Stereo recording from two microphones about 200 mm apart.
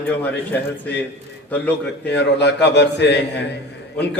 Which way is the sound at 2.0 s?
60° left (ahead or behind).